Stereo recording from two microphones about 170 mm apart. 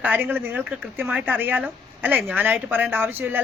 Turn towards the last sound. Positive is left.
turn(degrees=-10)  # may be behind; listen again after turning